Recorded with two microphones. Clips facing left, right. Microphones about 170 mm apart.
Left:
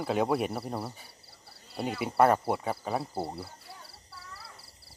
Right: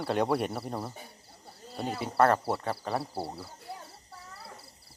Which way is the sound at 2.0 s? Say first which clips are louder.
Left 1 dB; 10° left (ahead or behind).